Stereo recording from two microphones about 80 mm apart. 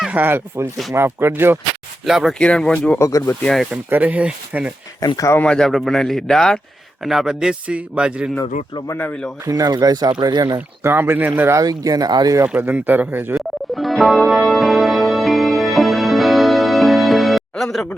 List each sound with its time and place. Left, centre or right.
0.0 s speech: right
2.0 s speech: centre
2.4 s speech: centre
3.0 s speech: left
3.4 s speech: centre
3.8 s speech: right
4.9 s speech: left
5.4 s a man's voice: centre
9.5 s speech: right
10.8 s speech: right
11.5 s speech: right
12.5 s speech: right
13.7 s music: centre